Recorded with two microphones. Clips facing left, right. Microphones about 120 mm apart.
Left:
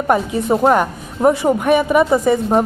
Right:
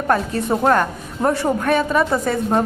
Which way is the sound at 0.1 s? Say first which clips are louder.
Left 3 dB; 15° left (ahead or behind).